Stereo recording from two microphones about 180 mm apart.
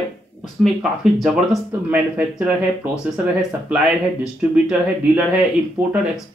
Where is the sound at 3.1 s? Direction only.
5° right (ahead or behind).